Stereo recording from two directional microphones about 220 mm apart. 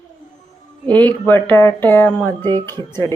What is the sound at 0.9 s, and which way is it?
Speech, 10° left (ahead or behind).